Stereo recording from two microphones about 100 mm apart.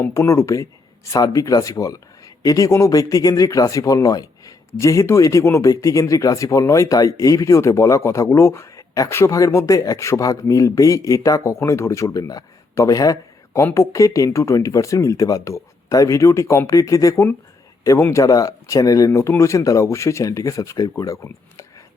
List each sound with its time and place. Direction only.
0.0 s speech: 25° left (ahead or behind)